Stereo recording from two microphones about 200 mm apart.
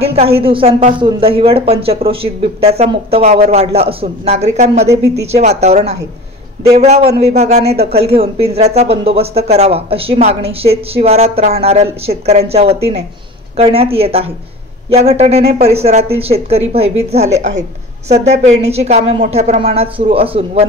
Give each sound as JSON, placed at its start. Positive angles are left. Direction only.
{"t": 0.0, "sound": "speech", "side_deg": -30}
{"t": 7.6, "sound": "speech", "side_deg": -55}
{"t": 8.1, "sound": "speech", "side_deg": -30}